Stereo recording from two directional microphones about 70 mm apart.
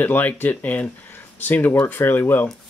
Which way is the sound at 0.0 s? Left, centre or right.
Left.